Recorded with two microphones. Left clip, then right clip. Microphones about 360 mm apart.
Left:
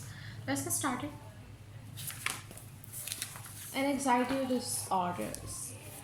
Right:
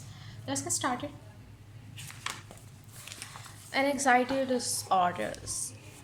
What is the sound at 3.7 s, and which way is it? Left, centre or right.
A woman's voice, right.